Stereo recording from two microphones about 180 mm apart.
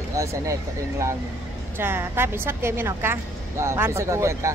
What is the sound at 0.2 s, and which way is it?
A woman's voice, 15° right (ahead or behind).